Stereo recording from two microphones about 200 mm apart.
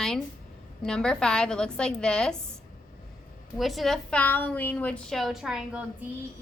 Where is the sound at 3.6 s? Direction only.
Centre (ahead or behind).